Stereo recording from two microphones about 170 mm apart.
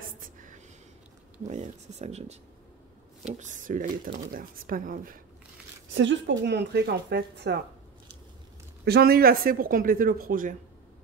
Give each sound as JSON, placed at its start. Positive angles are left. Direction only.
{"t": 0.2, "sound": "whispering", "side_deg": -50}
{"t": 1.5, "sound": "speech", "side_deg": -45}
{"t": 3.3, "sound": "speech", "side_deg": -50}
{"t": 5.9, "sound": "speech", "side_deg": -90}
{"t": 8.8, "sound": "speech", "side_deg": -65}